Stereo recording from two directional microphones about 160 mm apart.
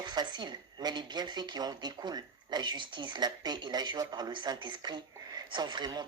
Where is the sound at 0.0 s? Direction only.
25° right (ahead or behind).